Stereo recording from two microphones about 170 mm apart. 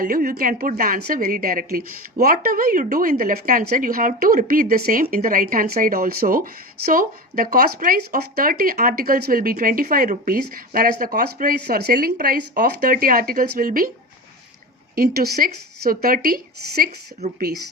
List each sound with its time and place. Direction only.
0.0 s a woman's voice: 60° right (ahead or behind)
14.9 s a woman's voice: 65° right (ahead or behind)